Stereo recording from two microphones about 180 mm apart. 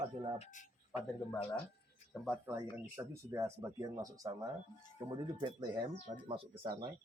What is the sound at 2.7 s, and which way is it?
Speech, 15° right (ahead or behind).